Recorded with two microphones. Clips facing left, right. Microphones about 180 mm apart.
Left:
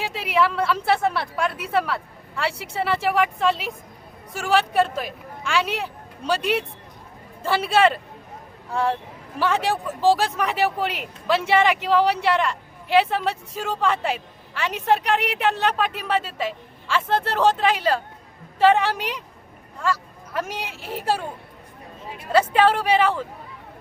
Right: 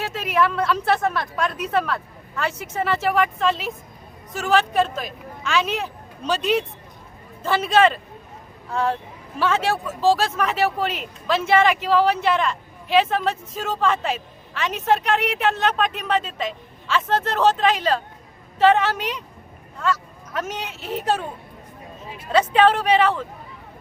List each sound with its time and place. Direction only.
0.0 s speech: 10° left (ahead or behind)
22.3 s speech: 10° left (ahead or behind)